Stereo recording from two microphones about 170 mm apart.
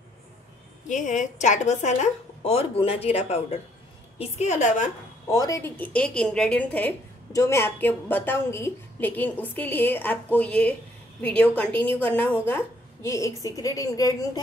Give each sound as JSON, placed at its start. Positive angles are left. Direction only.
{"t": 0.8, "sound": "a woman's voice", "side_deg": 45}
{"t": 5.3, "sound": "a woman's voice", "side_deg": 20}